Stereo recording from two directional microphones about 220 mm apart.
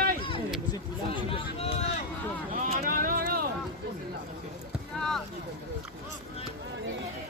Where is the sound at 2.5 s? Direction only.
30° right (ahead or behind).